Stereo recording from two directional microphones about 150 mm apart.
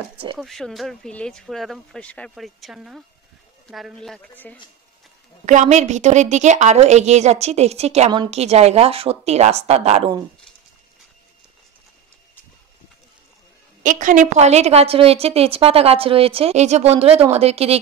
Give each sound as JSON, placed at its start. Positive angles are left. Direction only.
{"t": 0.4, "sound": "speech", "side_deg": 0}
{"t": 5.4, "sound": "a woman's voice", "side_deg": -55}
{"t": 13.8, "sound": "a woman's voice", "side_deg": -60}